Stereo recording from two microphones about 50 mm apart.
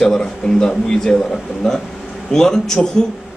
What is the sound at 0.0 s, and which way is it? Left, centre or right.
Speech, centre.